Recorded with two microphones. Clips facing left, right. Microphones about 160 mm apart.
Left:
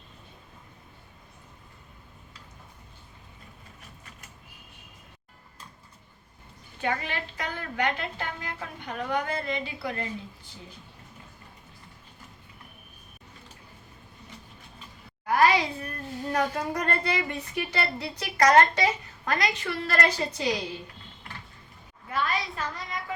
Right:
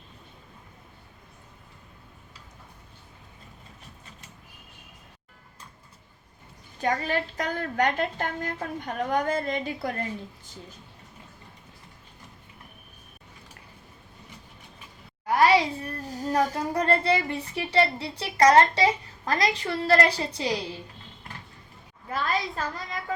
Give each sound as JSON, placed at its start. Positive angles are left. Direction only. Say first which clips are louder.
{"t": 6.7, "sound": "a child's voice", "louder": "right 4 dB", "side_deg": -40}
{"t": 15.3, "sound": "a child's voice", "louder": "right 2 dB", "side_deg": -30}
{"t": 22.1, "sound": "a sound", "louder": "right 1 dB", "side_deg": -35}